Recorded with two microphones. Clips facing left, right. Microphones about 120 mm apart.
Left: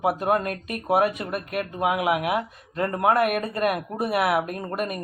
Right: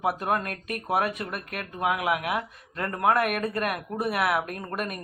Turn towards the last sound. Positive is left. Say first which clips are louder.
# left 4 dB
turn(degrees=15)  # may be behind; listen again after turning